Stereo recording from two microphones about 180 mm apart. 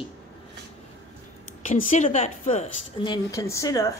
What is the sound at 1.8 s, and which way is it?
A woman's voice, 45° left (ahead or behind).